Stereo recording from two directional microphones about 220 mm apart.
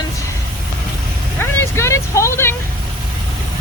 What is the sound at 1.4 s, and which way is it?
Vehicle, 10° left (ahead or behind).